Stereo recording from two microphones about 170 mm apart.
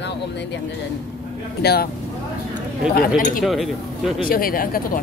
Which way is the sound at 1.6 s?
70° left (ahead or behind).